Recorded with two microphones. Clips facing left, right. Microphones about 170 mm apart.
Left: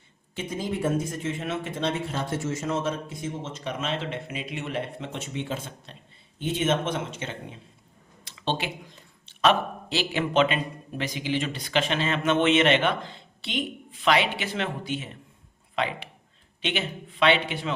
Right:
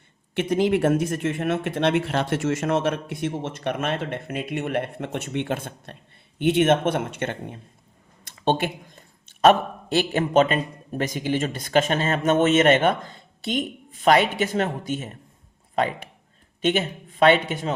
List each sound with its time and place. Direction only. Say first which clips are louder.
0.3 s speech: right 9 dB; 75° right (ahead or behind); by 6.0 s 55° right (ahead or behind)
6.4 s speech: right 7 dB; 65° right (ahead or behind); by 17.7 s 45° right (ahead or behind)